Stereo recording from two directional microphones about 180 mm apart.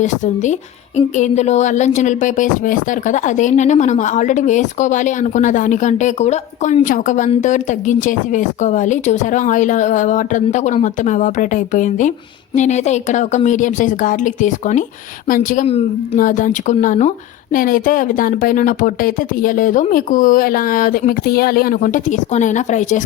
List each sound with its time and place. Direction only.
0.9 s speech: 40° left (ahead or behind)
16.1 s speech: 45° left (ahead or behind)